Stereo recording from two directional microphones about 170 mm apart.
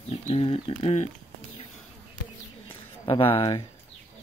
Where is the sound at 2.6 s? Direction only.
30° left (ahead or behind).